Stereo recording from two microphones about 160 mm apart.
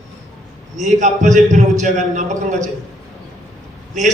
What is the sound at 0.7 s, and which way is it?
A man's voice, 50° right (ahead or behind).